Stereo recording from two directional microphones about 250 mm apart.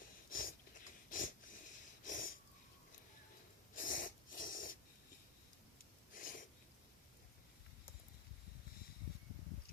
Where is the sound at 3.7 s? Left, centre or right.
Left.